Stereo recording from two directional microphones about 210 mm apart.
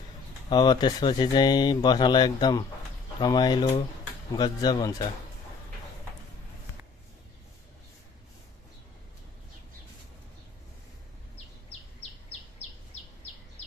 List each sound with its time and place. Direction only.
0.5 s speech: 20° left (ahead or behind)